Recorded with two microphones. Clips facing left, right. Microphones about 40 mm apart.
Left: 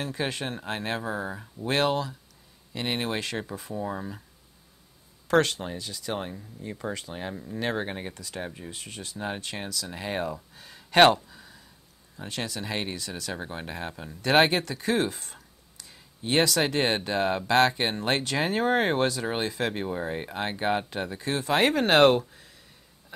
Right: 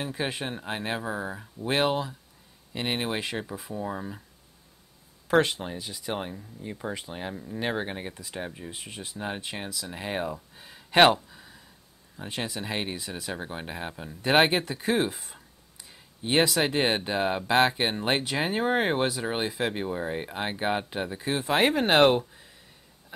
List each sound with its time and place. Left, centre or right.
0.0 s speech: centre
1.7 s speech: centre
5.3 s speech: centre
6.1 s speech: centre
8.1 s speech: centre
8.4 s speech: centre
8.7 s speech: centre
9.5 s speech: centre
10.6 s a sound: centre
12.3 s speech: centre